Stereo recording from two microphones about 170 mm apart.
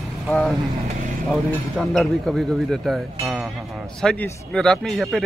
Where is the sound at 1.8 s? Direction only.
Centre (ahead or behind).